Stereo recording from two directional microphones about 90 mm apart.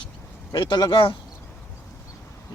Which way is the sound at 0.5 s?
60° left (ahead or behind).